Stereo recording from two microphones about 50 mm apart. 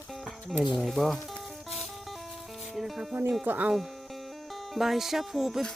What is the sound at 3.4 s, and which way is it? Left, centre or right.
Speech, right.